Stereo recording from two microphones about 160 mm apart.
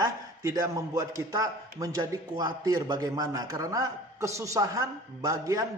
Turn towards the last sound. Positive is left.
turn(degrees=-20)  # may be behind; listen again after turning